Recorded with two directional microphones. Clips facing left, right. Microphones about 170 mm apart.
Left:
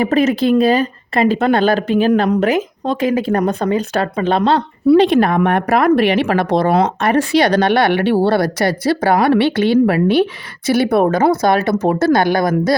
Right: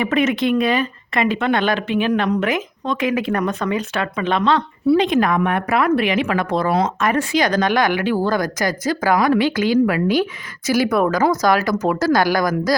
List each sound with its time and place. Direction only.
0.0 s speech: 35° left (ahead or behind)
6.4 s speech: 75° left (ahead or behind)
7.0 s speech: 35° left (ahead or behind)